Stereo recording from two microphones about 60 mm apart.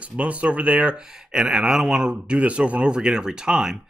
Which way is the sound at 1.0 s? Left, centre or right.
Centre.